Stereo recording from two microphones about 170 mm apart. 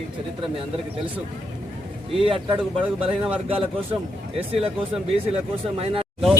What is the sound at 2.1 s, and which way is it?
Speech, 35° right (ahead or behind).